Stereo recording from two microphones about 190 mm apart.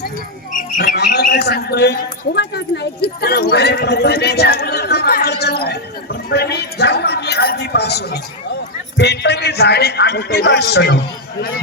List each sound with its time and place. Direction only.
0.8 s a man's voice: 60° left (ahead or behind)